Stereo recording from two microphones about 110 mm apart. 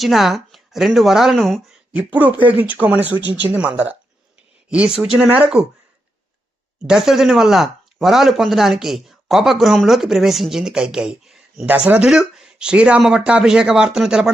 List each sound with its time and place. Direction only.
0.0 s speech: centre (ahead or behind)
1.9 s speech: 15° right (ahead or behind)
6.8 s speech: 5° right (ahead or behind)